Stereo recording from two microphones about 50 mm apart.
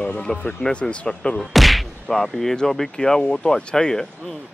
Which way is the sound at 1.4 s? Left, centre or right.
Centre.